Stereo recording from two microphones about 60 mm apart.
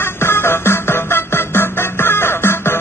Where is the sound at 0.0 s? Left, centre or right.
Left.